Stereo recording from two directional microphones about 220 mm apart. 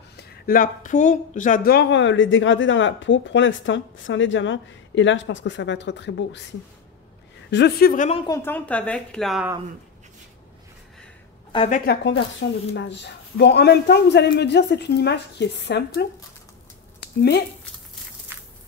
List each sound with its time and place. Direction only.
0.1 s speech: 45° left (ahead or behind)
7.5 s a woman's voice: 45° left (ahead or behind); by 8.3 s 30° left (ahead or behind)
8.3 s a woman's voice: 10° left (ahead or behind)
11.5 s a woman's voice: 25° left (ahead or behind)
11.8 s speech: 45° left (ahead or behind)
17.0 s a sound: 50° left (ahead or behind)
18.3 s walk: 10° right (ahead or behind)